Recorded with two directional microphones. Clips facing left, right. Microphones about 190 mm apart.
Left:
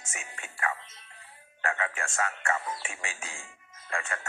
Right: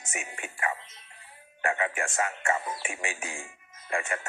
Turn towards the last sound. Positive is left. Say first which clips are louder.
# right 4 dB
turn(degrees=-15)  # may be behind; listen again after turning